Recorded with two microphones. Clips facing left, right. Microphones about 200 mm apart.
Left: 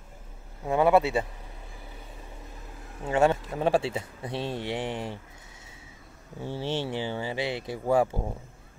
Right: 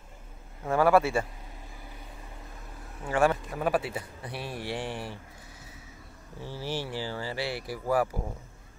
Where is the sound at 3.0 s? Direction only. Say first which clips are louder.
Left 2 dB; 20° left (ahead or behind).